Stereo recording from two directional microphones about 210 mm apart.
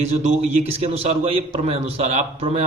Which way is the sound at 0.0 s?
30° right (ahead or behind).